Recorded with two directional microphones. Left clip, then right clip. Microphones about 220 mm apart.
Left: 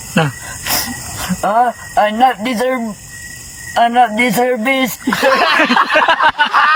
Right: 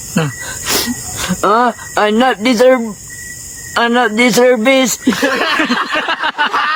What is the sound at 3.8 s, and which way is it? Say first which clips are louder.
Speech: left 1 dB; 30° right (ahead or behind).